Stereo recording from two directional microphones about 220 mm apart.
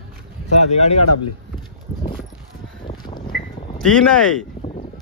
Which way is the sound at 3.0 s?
20° left (ahead or behind).